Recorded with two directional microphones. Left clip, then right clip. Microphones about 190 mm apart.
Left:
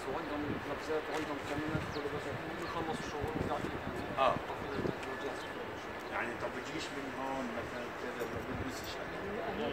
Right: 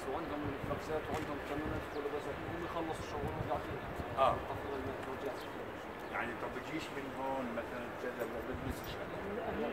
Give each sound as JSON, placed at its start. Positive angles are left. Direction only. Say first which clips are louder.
{"t": 4.2, "sound": "speech", "louder": "even", "side_deg": -55}